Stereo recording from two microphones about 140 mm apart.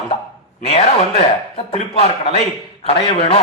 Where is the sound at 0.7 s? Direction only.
45° left (ahead or behind).